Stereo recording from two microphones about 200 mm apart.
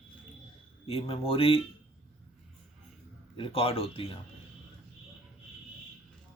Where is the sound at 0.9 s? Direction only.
30° left (ahead or behind).